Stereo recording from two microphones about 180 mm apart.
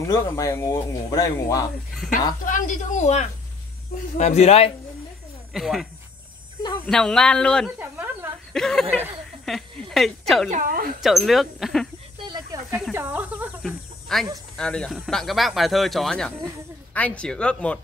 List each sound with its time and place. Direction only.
0.0 s speech: 20° left (ahead or behind)
2.4 s speech: 45° left (ahead or behind)
5.5 s speech: centre (ahead or behind)
6.9 s speech: 5° left (ahead or behind)
7.8 s speech: 10° right (ahead or behind)
8.5 s speech: 5° left (ahead or behind)
10.5 s speech: 50° right (ahead or behind)
11.0 s speech: centre (ahead or behind)
12.2 s snake: 20° right (ahead or behind)
12.7 s speech: 10° right (ahead or behind)
13.6 s chicken: centre (ahead or behind)
14.6 s speech: 5° left (ahead or behind)